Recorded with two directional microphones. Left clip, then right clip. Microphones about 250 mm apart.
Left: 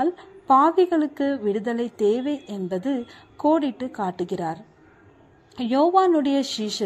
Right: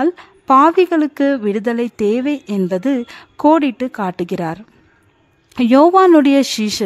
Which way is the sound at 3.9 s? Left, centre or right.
Right.